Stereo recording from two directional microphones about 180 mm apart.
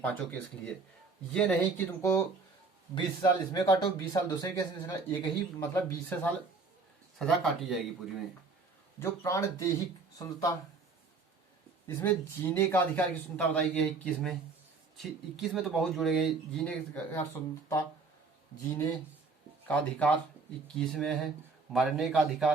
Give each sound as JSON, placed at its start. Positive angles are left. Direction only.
{"t": 0.0, "sound": "a man's voice", "side_deg": 10}
{"t": 9.0, "sound": "a man's voice", "side_deg": 15}
{"t": 11.9, "sound": "a man's voice", "side_deg": 15}
{"t": 19.6, "sound": "a man's voice", "side_deg": 5}